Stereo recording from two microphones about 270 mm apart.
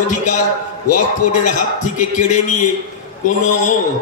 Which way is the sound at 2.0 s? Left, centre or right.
Left.